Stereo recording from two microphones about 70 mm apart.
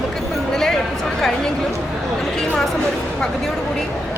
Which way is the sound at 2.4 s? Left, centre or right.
Centre.